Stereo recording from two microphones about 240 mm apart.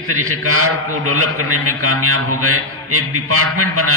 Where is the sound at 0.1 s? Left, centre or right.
Right.